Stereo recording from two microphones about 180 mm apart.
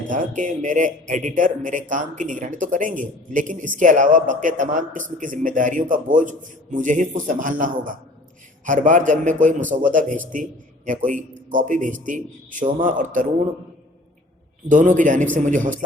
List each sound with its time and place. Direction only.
0.1 s a man's voice: 45° right (ahead or behind)
14.7 s a man's voice: 45° right (ahead or behind)